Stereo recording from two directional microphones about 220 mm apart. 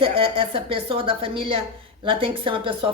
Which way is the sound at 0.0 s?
25° right (ahead or behind).